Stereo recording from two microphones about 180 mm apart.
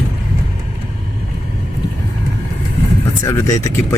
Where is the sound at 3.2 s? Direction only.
15° left (ahead or behind).